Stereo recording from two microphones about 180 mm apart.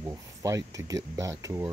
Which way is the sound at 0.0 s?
15° right (ahead or behind).